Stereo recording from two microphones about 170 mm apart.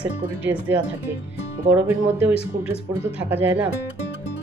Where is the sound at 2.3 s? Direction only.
35° left (ahead or behind).